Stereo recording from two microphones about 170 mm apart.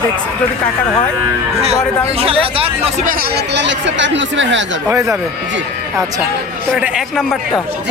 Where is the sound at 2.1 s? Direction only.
35° right (ahead or behind); by 4.6 s 90° right.